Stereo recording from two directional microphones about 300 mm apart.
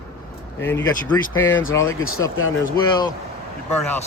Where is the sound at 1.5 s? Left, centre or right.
Left.